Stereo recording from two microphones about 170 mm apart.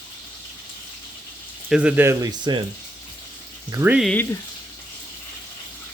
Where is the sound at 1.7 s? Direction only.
5° right (ahead or behind); by 2.6 s 25° right (ahead or behind).